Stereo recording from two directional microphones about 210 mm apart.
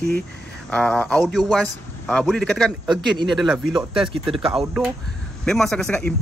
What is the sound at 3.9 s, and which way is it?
Speech, 25° right (ahead or behind).